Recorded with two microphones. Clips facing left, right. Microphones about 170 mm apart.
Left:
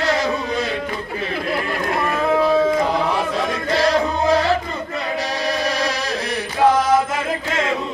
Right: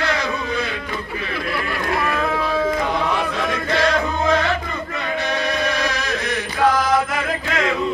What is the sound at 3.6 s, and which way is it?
Music, 35° left (ahead or behind).